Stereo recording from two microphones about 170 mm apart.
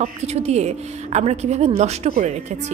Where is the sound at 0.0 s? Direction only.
40° right (ahead or behind).